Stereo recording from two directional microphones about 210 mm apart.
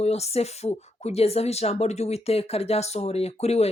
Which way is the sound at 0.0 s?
30° left (ahead or behind).